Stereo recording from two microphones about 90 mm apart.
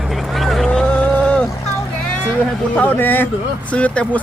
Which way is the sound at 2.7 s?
20° left (ahead or behind).